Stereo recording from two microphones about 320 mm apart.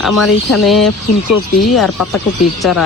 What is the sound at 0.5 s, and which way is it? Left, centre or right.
Speech, centre.